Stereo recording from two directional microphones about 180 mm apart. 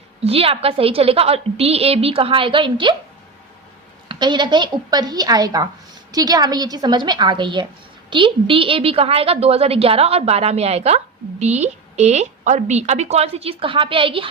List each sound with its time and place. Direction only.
0.3 s a woman's voice: 35° right (ahead or behind)
4.1 s a woman's voice: 25° right (ahead or behind)